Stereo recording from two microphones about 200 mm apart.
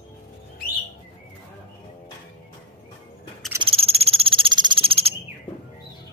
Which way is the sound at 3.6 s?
30° right (ahead or behind).